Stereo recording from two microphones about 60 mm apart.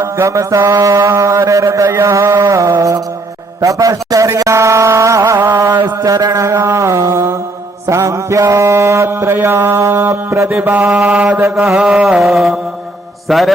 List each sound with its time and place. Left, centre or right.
0.0 s mantra: right
2.0 s music: right
2.5 s mantra: right
3.6 s a man's voice: right
4.4 s mantra: right
4.9 s music: right
6.0 s a sound: right
6.6 s mantra: right
9.0 s a sound: right
9.6 s mantra: right
10.5 s mantra: right
11.5 s a sound: centre
12.2 s mantra: centre